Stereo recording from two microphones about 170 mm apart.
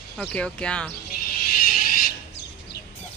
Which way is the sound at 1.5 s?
55° left (ahead or behind).